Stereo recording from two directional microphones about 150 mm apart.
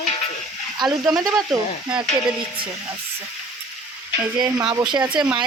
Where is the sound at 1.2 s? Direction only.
25° right (ahead or behind).